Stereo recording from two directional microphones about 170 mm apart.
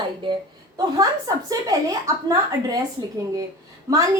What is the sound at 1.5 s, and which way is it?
A woman's voice, 20° right (ahead or behind).